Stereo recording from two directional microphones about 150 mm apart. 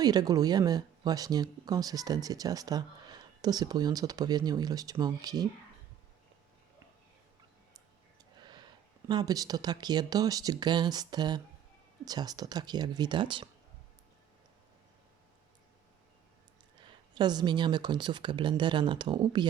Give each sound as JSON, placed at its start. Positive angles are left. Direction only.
{"t": 0.0, "sound": "speech", "side_deg": -25}
{"t": 8.4, "sound": "speech", "side_deg": -30}
{"t": 16.8, "sound": "speech", "side_deg": -30}